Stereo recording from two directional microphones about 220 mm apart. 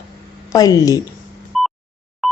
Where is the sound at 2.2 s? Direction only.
Centre (ahead or behind).